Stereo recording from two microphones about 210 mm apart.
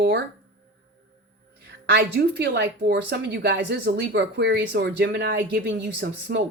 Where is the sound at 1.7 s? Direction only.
55° right (ahead or behind).